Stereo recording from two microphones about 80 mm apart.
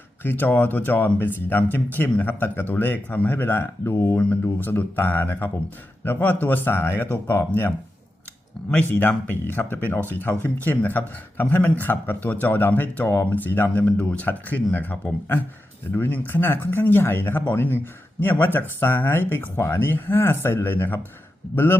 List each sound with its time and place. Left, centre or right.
0.2 s speech: left
8.7 s speech: centre
16.0 s speech: left